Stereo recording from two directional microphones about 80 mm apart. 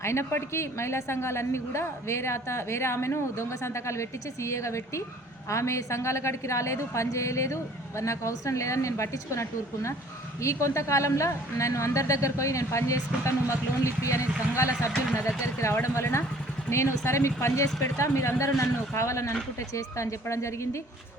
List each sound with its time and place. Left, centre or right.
0.0 s a woman's voice: left